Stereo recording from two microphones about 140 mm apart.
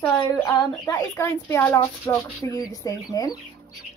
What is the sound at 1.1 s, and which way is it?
A woman's voice, 15° left (ahead or behind).